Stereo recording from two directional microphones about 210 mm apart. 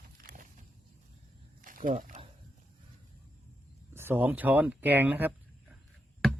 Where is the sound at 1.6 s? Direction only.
40° right (ahead or behind).